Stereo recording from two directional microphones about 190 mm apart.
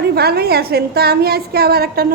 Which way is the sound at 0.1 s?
55° right (ahead or behind).